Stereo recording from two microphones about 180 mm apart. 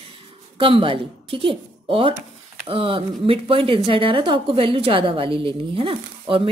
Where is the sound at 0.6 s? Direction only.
30° right (ahead or behind).